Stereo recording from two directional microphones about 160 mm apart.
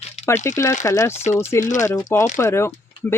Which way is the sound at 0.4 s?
15° left (ahead or behind).